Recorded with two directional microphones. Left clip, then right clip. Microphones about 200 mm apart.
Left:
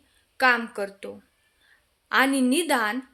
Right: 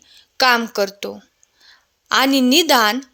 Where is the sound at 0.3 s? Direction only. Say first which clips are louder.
Right 6 dB; 45° right (ahead or behind).